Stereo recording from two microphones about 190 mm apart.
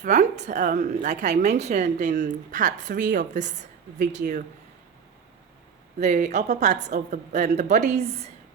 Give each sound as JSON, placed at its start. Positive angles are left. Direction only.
{"t": 0.0, "sound": "a woman's voice", "side_deg": -40}
{"t": 6.0, "sound": "a woman's voice", "side_deg": -40}